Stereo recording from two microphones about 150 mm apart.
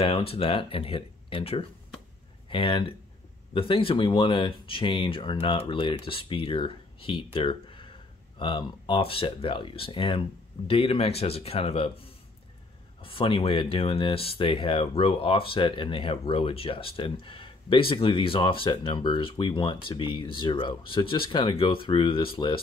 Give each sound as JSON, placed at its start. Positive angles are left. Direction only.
{"t": 0.0, "sound": "speech", "side_deg": 40}
{"t": 13.0, "sound": "speech", "side_deg": 35}